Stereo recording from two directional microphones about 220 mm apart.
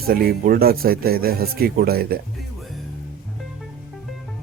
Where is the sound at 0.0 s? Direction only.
45° right (ahead or behind).